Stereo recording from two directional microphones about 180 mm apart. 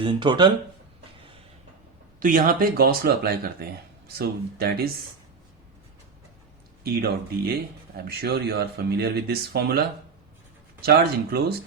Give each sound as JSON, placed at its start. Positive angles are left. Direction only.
{"t": 0.0, "sound": "speech", "side_deg": -25}
{"t": 2.1, "sound": "speech", "side_deg": -50}
{"t": 6.8, "sound": "speech", "side_deg": -60}